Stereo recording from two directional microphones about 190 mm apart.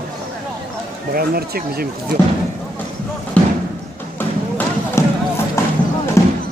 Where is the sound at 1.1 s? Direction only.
50° right (ahead or behind).